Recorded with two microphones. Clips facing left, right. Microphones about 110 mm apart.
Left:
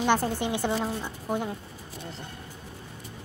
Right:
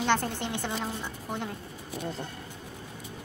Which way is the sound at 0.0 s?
10° left (ahead or behind).